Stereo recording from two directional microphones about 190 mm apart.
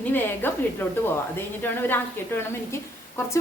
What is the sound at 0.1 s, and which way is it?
A woman's voice, 10° left (ahead or behind).